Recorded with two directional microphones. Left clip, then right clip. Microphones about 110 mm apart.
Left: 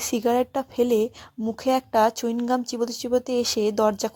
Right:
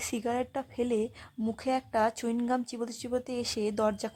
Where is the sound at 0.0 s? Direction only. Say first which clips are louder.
Left 10 dB; 25° left (ahead or behind).